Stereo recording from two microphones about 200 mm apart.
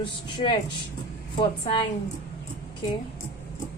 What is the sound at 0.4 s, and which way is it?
A woman's voice, 30° left (ahead or behind).